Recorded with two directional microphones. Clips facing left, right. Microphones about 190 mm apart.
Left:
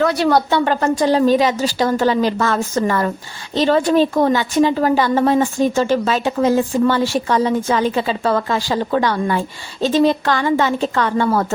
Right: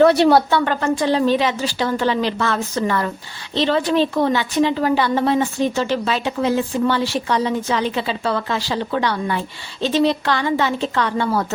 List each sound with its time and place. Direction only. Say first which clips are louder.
0.0 s a woman's voice: right 4 dB; 25° right (ahead or behind)
0.5 s a woman's voice: left 2 dB; 30° left (ahead or behind)